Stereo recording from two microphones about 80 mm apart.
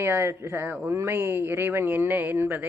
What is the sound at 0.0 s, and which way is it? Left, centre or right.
Speech, right.